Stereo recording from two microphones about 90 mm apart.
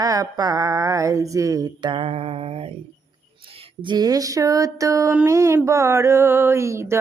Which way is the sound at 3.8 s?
50° right (ahead or behind).